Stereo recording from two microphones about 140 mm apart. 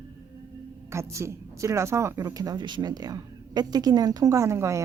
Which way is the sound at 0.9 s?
20° right (ahead or behind).